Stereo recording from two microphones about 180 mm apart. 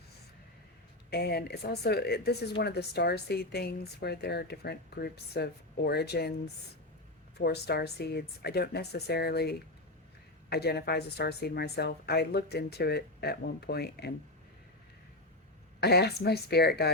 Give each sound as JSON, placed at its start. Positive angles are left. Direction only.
{"t": 1.1, "sound": "speech", "side_deg": 60}
{"t": 7.3, "sound": "speech", "side_deg": 65}
{"t": 15.8, "sound": "speech", "side_deg": 60}